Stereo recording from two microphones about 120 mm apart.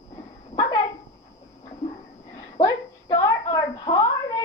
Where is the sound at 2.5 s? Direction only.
35° left (ahead or behind).